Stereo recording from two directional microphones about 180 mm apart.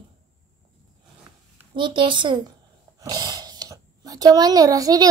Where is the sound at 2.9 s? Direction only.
20° right (ahead or behind).